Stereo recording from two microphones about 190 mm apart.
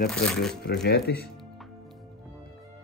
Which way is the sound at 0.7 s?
60° left (ahead or behind).